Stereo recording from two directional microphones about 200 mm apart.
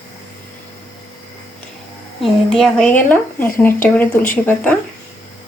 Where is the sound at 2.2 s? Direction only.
Centre (ahead or behind).